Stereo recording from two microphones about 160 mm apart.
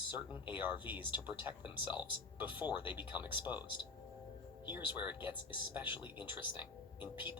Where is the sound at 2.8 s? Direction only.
10° right (ahead or behind).